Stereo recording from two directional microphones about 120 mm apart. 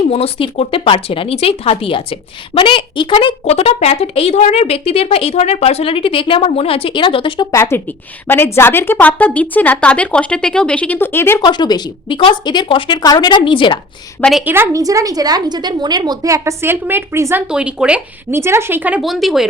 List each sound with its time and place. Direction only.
0.1 s speech: 55° left (ahead or behind)
3.4 s speech: 60° left (ahead or behind); by 7.4 s 45° left (ahead or behind)
7.5 s a woman's voice: 20° left (ahead or behind)
11.4 s a woman's voice: 40° left (ahead or behind)
14.2 s speech: 5° left (ahead or behind)
14.4 s a woman's voice: 20° right (ahead or behind)
17.5 s speech: 10° right (ahead or behind)
18.3 s a woman's voice: 20° right (ahead or behind)
19.0 s speech: centre (ahead or behind)